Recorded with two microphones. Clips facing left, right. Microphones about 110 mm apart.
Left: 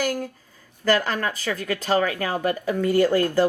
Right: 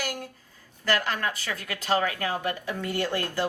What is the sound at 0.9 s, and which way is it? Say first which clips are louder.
A woman's voice: left 5 dB; 40° left (ahead or behind).